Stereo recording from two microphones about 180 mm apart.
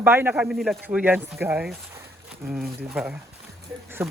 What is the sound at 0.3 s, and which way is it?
Speech, centre (ahead or behind).